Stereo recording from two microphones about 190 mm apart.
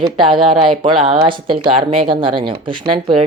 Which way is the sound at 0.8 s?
25° right (ahead or behind).